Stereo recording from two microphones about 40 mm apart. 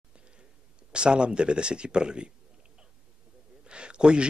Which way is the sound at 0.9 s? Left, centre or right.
Right.